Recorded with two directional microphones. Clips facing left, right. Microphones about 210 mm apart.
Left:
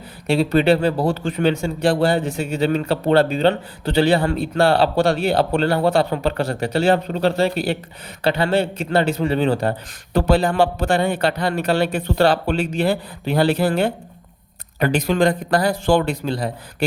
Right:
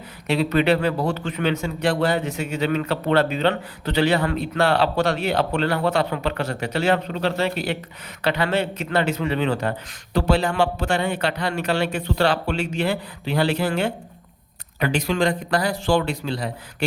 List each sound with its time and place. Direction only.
0.3 s speech: 30° left (ahead or behind); by 16.5 s 45° left (ahead or behind)